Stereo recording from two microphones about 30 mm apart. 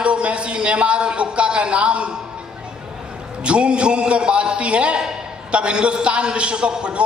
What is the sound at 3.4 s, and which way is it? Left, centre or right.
A man's voice, right.